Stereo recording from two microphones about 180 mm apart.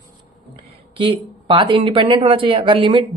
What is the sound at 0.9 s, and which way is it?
Speech, 25° right (ahead or behind).